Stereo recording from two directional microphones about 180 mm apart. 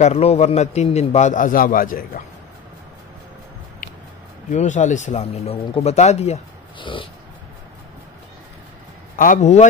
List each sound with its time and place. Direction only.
0.0 s speech: 35° left (ahead or behind)
4.5 s speech: 40° left (ahead or behind)
9.1 s a man's voice: 45° left (ahead or behind)